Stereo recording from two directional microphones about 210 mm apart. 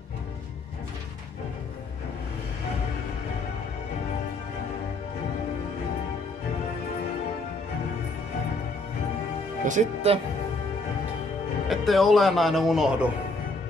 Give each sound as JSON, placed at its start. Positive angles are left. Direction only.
{"t": 9.7, "sound": "speech", "side_deg": -35}
{"t": 11.7, "sound": "speech", "side_deg": 0}